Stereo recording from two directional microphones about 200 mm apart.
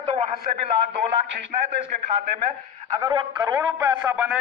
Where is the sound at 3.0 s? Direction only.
20° right (ahead or behind).